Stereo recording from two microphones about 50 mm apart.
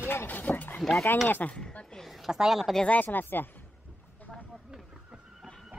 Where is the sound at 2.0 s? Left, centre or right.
Centre.